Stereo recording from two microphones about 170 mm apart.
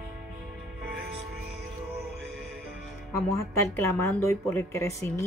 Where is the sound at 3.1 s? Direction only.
20° left (ahead or behind).